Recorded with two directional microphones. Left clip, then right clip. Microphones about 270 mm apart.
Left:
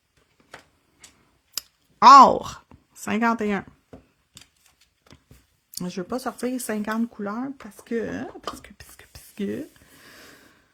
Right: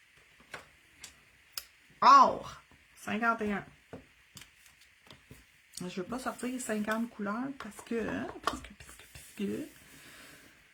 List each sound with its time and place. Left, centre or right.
1.5 s a sound: left
3.0 s speech: left
5.7 s speech: left
8.6 s stir: left